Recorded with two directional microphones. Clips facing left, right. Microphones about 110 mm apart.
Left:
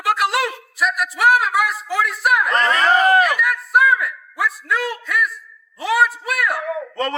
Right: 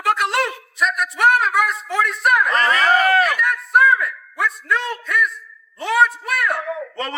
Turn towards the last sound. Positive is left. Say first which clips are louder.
# left 3 dB
turn(degrees=0)  # may be behind; listen again after turning